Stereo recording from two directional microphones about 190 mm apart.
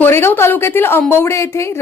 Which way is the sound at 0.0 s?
10° left (ahead or behind).